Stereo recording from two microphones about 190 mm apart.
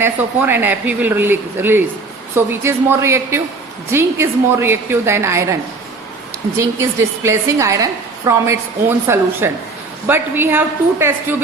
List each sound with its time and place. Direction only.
0.0 s a woman's voice: 10° right (ahead or behind)
6.6 s a woman's voice: 15° right (ahead or behind)